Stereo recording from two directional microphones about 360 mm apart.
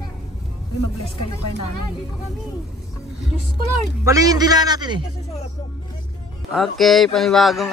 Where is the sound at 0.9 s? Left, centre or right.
Left.